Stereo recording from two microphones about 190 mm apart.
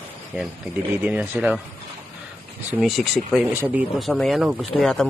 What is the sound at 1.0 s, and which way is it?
Speech, 10° right (ahead or behind).